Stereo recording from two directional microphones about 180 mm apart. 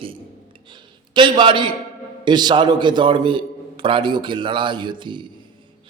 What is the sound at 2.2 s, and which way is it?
A man's voice, 25° right (ahead or behind).